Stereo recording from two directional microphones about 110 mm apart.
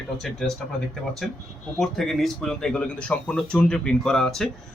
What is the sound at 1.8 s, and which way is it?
Speech, centre (ahead or behind).